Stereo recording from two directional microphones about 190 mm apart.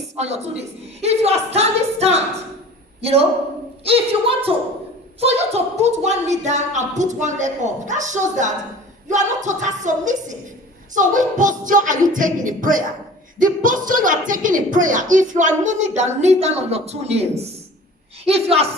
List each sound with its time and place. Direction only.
0.2 s a woman's voice: 35° right (ahead or behind)